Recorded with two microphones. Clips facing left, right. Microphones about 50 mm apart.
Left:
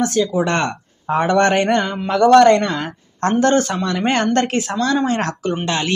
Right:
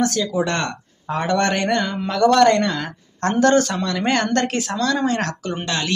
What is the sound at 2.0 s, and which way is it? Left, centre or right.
Speech, centre.